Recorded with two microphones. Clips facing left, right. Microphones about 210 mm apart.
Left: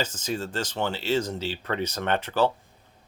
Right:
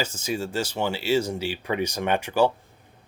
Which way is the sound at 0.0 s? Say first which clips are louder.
Right 1 dB; 10° right (ahead or behind).